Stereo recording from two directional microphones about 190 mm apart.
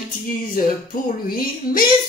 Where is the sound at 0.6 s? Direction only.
50° left (ahead or behind).